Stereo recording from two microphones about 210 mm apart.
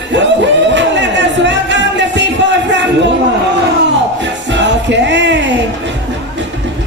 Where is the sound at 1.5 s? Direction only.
60° right (ahead or behind).